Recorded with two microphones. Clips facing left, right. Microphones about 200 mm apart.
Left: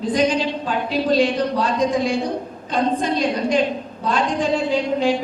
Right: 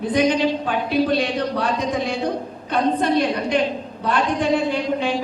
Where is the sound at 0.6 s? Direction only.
60° right (ahead or behind).